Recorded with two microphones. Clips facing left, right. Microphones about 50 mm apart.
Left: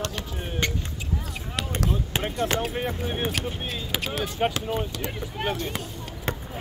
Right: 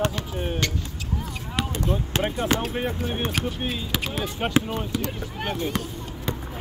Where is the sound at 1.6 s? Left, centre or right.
Centre.